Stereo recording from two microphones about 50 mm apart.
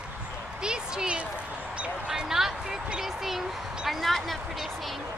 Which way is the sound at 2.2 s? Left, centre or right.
Centre.